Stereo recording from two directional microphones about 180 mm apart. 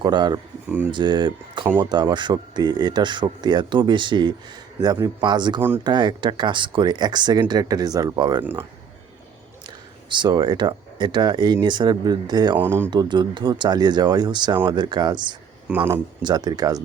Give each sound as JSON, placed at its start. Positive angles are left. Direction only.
{"t": 0.0, "sound": "speech", "side_deg": -25}
{"t": 9.6, "sound": "speech", "side_deg": -25}
{"t": 12.5, "sound": "speech", "side_deg": -15}
{"t": 12.9, "sound": "speech", "side_deg": -25}
{"t": 15.7, "sound": "speech", "side_deg": -10}
{"t": 16.2, "sound": "speech", "side_deg": -25}